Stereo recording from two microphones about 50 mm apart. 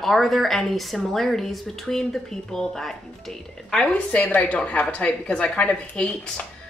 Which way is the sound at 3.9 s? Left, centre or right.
Left.